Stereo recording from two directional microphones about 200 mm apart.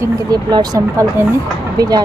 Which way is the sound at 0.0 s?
20° right (ahead or behind).